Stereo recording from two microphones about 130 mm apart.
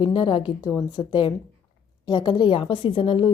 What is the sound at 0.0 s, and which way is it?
A woman's voice, 40° left (ahead or behind).